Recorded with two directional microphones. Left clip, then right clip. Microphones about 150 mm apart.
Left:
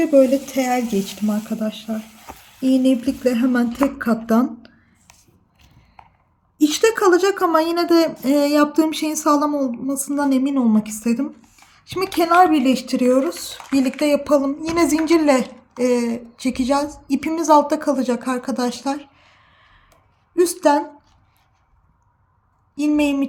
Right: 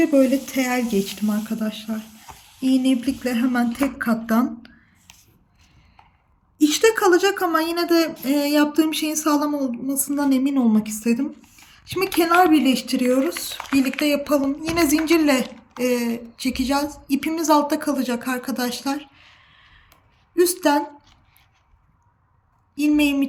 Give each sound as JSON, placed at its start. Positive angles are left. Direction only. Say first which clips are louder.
{"t": 0.2, "sound": "a woman's voice", "louder": "left 4 dB", "side_deg": 20}
{"t": 6.6, "sound": "speech", "louder": "left 1 dB", "side_deg": 45}
{"t": 10.1, "sound": "a woman's voice", "louder": "left 1 dB", "side_deg": 30}
{"t": 20.3, "sound": "a woman's voice", "louder": "left 2 dB", "side_deg": 40}
{"t": 23.0, "sound": "a woman's voice", "louder": "left 1 dB", "side_deg": 35}